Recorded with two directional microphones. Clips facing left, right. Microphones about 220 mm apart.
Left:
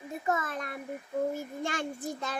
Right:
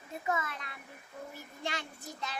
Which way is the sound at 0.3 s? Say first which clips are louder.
Left 4 dB; 45° left (ahead or behind).